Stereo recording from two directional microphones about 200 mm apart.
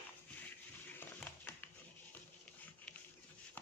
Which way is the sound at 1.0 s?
10° left (ahead or behind).